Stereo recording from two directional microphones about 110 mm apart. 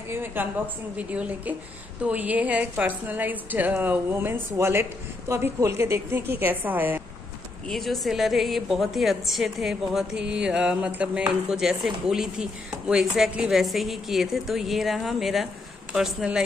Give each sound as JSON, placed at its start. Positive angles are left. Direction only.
{"t": 0.1, "sound": "a woman's voice", "side_deg": -20}
{"t": 7.6, "sound": "a woman's voice", "side_deg": 0}